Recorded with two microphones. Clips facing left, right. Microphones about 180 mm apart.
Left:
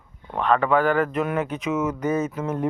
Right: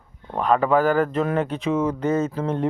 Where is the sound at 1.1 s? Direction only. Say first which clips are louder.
Right 2 dB; 30° right (ahead or behind).